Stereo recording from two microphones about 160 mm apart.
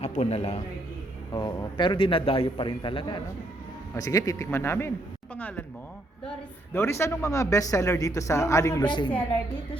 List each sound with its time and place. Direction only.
0.0 s a man's voice: 40° left (ahead or behind)
1.3 s a man's voice: 25° left (ahead or behind)
3.9 s speech: 20° left (ahead or behind)
6.7 s speech: 15° left (ahead or behind)